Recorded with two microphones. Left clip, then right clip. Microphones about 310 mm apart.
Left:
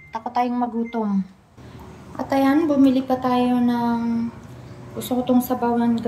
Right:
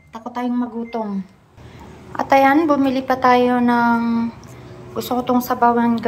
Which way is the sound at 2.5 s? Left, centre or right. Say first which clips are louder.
Right 2 dB; right.